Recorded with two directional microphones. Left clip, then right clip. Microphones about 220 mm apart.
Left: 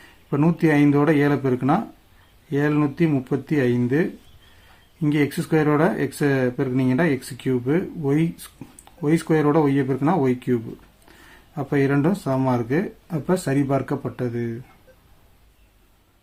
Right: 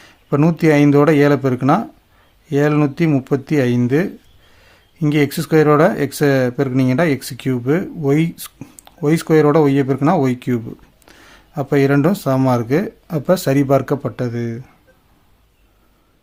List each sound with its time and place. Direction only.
0.3 s speech: 45° right (ahead or behind)